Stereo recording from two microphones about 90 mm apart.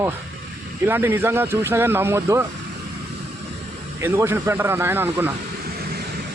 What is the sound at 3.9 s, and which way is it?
Speech, 25° right (ahead or behind).